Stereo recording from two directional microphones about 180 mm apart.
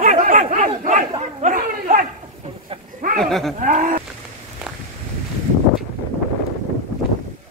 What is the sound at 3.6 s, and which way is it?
Speech, 45° right (ahead or behind).